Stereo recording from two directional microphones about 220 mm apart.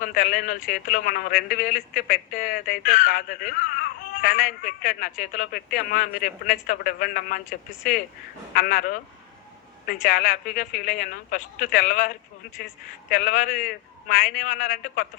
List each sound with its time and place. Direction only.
0.0 s speech: 40° left (ahead or behind)